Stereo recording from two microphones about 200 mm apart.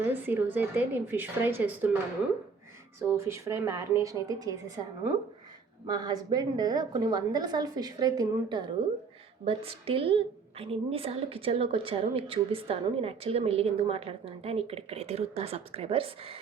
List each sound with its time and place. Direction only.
0.0 s speech: 10° right (ahead or behind)
3.0 s speech: 15° right (ahead or behind)
5.8 s a woman's voice: 20° right (ahead or behind)